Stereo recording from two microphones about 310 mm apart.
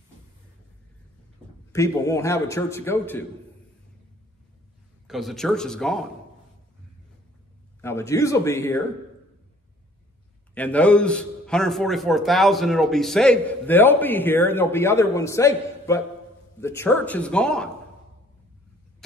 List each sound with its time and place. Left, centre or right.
1.7 s a man's voice: centre
5.0 s a man's voice: centre
7.8 s a man's voice: centre
10.5 s a man's voice: centre